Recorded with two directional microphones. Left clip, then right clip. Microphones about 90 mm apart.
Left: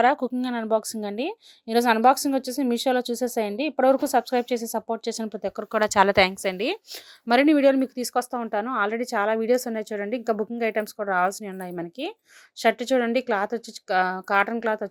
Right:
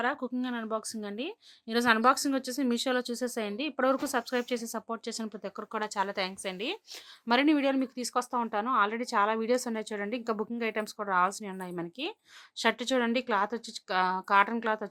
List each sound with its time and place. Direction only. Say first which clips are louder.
0.0 s speech: left 11 dB; 90° left
0.4 s a woman's voice: left 11 dB; 80° left; by 5.6 s 50° left (ahead or behind)
6.4 s speech: left 9 dB; 90° left
7.3 s a woman's voice: left 8 dB; 50° left (ahead or behind)